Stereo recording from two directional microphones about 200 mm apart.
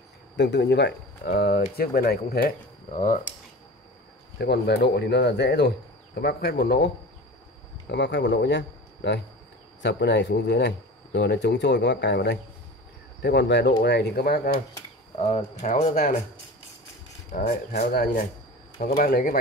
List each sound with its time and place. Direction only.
0.4 s speech: 60° left (ahead or behind)
4.4 s speech: 55° left (ahead or behind)
7.9 s speech: 60° left (ahead or behind)
15.1 s speech: 30° left (ahead or behind)
15.6 s speech: 40° left (ahead or behind)
17.3 s speech: 40° left (ahead or behind)